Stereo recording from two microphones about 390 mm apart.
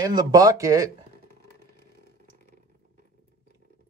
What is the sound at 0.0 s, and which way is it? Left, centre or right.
Speech, centre.